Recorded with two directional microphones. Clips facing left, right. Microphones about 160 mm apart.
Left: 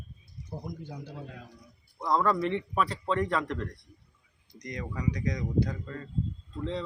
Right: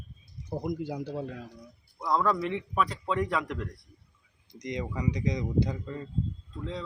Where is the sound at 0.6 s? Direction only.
85° right.